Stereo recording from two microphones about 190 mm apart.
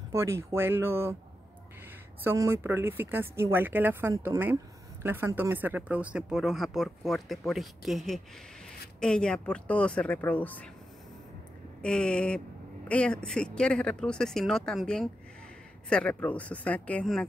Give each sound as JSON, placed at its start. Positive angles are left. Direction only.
{"t": 0.1, "sound": "speech", "side_deg": -15}
{"t": 2.2, "sound": "speech", "side_deg": -15}
{"t": 11.8, "sound": "speech", "side_deg": 5}